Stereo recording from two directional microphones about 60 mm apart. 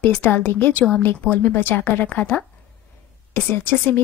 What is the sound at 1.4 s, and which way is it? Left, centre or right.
Speech, left.